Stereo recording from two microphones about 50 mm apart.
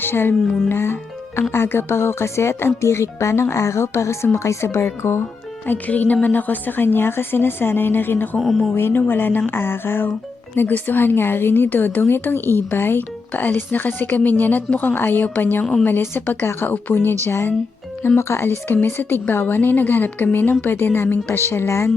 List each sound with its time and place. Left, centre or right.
0.0 s a woman's voice: left
5.6 s a woman's voice: left
8.4 s speech: centre
8.9 s a woman's voice: left